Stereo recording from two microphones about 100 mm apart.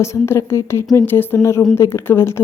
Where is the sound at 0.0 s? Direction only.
25° left (ahead or behind).